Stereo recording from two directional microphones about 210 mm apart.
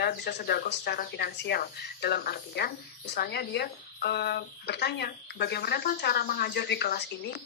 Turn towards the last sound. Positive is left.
turn(degrees=50)  # may be behind; listen again after turning